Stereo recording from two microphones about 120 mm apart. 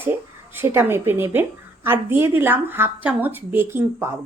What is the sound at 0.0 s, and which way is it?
Speech, 20° right (ahead or behind).